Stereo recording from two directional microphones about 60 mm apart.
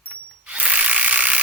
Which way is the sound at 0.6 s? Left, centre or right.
Right.